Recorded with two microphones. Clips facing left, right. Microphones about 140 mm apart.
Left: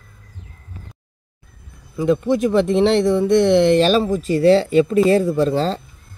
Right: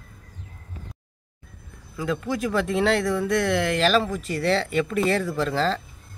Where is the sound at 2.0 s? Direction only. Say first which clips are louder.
Left 9 dB; 25° left (ahead or behind).